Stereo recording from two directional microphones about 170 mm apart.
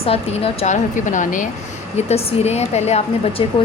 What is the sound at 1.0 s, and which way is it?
Speech, 50° left (ahead or behind).